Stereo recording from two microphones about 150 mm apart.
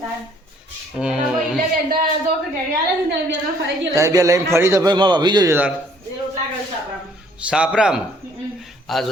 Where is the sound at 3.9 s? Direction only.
20° right (ahead or behind).